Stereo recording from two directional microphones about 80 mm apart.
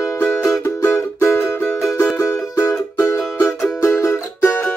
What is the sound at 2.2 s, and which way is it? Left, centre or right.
Music, left.